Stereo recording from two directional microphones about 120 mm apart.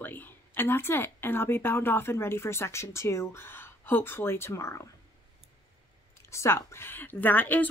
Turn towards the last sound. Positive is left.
turn(degrees=15)  # may be behind; listen again after turning